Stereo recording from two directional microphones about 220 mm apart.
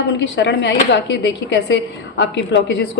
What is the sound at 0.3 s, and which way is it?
A woman's voice, 55° left (ahead or behind).